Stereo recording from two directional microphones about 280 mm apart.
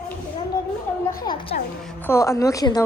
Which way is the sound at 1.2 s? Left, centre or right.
Centre.